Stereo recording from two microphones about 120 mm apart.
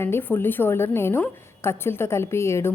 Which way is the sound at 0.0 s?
20° left (ahead or behind).